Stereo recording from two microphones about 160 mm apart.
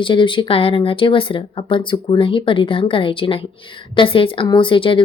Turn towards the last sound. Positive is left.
turn(degrees=35)  # may be behind; listen again after turning